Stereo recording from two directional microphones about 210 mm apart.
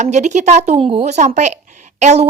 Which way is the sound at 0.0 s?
35° right (ahead or behind).